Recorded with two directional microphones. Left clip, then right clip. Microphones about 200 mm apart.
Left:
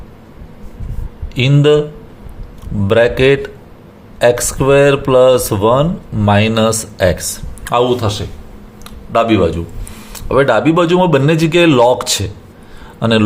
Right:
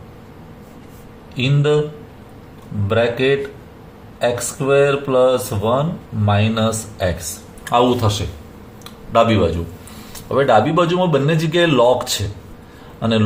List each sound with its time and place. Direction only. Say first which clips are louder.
1.4 s speech: left 6 dB; 55° left (ahead or behind)
2.8 s speech: left 6 dB; 55° left (ahead or behind)
7.6 s a man's voice: left 2 dB; 30° left (ahead or behind)
8.8 s a sound: left 1 dB; 25° left (ahead or behind)
10.1 s a man's voice: left 3 dB; 40° left (ahead or behind)